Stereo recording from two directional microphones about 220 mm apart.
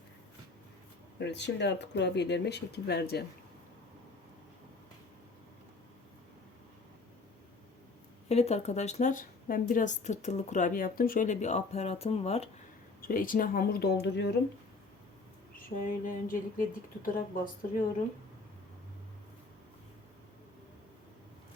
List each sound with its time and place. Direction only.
1.2 s speech: 50° left (ahead or behind)
8.3 s a woman's voice: 30° left (ahead or behind)
13.0 s a woman's voice: 40° left (ahead or behind)
16.0 s a woman's voice: 40° left (ahead or behind)